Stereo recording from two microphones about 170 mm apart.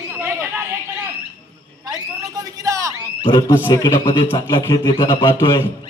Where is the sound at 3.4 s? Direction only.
15° left (ahead or behind).